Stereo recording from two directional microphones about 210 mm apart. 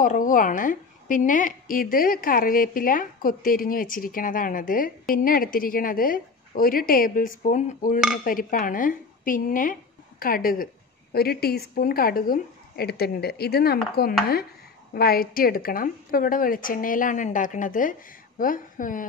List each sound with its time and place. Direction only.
0.0 s a woman's voice: 40° left (ahead or behind)